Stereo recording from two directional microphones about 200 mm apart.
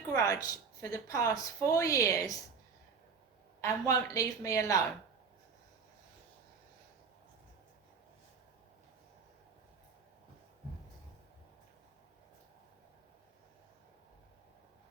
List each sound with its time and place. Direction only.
0.1 s speech: 15° left (ahead or behind)
3.6 s speech: 15° left (ahead or behind)